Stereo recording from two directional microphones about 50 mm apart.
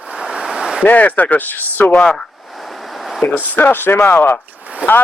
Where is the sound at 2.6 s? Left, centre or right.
Centre.